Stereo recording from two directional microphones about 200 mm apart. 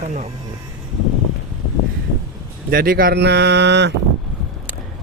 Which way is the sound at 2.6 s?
45° right (ahead or behind).